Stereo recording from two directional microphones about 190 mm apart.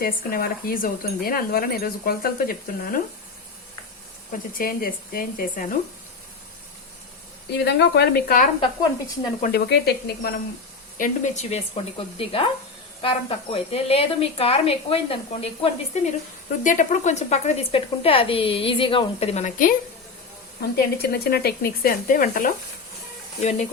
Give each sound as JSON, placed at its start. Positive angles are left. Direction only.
{"t": 0.0, "sound": "speech", "side_deg": 50}
{"t": 4.3, "sound": "speech", "side_deg": 50}
{"t": 7.6, "sound": "speech", "side_deg": 60}
{"t": 10.9, "sound": "a woman's voice", "side_deg": 40}
{"t": 16.6, "sound": "a woman's voice", "side_deg": 40}
{"t": 20.6, "sound": "a woman's voice", "side_deg": 55}